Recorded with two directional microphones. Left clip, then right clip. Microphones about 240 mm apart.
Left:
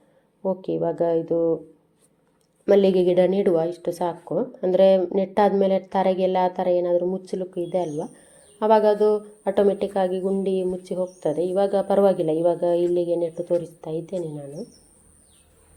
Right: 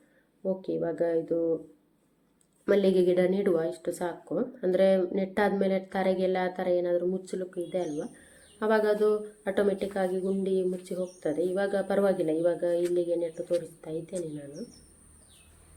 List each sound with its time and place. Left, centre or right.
0.4 s a woman's voice: centre
2.6 s a woman's voice: centre